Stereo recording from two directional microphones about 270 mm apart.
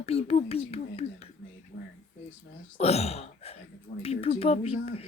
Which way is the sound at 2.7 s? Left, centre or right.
Left.